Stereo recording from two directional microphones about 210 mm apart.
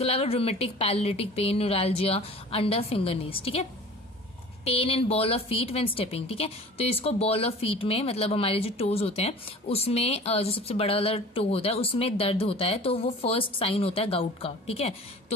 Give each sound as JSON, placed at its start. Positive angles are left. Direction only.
{"t": 0.0, "sound": "speech", "side_deg": 30}
{"t": 4.6, "sound": "speech", "side_deg": 25}